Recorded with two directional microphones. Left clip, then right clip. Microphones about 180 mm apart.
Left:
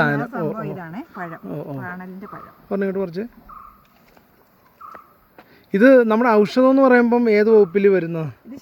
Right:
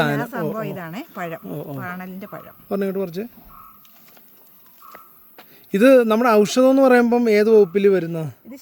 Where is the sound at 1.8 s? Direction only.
90° right.